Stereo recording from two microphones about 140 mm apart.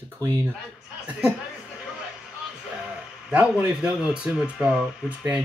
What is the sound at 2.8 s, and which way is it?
A man's voice, 10° right (ahead or behind).